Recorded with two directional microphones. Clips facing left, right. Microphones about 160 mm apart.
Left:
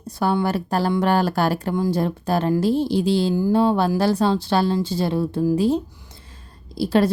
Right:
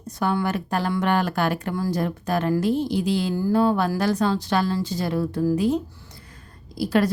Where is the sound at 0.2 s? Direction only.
30° left (ahead or behind).